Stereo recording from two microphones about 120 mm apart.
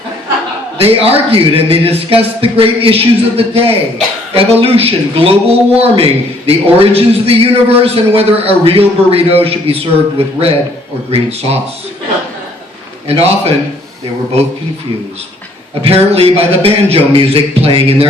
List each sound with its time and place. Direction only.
0.8 s a man's voice: 55° right (ahead or behind)
13.1 s a man's voice: 55° right (ahead or behind)
15.8 s a man's voice: 55° right (ahead or behind)